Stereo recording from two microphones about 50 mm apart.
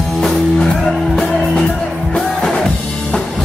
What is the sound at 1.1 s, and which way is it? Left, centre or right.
Music, centre.